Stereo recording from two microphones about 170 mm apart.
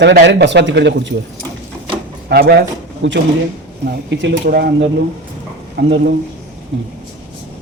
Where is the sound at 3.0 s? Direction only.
90° right.